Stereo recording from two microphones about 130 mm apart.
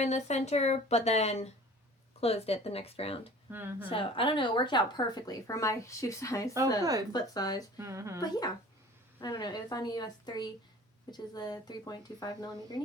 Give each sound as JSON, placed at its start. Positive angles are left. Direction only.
{"t": 0.0, "sound": "speech", "side_deg": 60}
{"t": 3.5, "sound": "speech", "side_deg": -15}
{"t": 3.8, "sound": "a woman's voice", "side_deg": 40}
{"t": 7.8, "sound": "speech", "side_deg": -25}
{"t": 8.2, "sound": "speech", "side_deg": 30}